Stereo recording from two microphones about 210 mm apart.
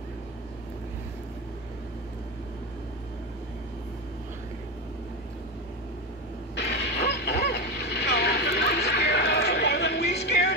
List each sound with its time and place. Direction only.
6.5 s vehicle: 55° left (ahead or behind)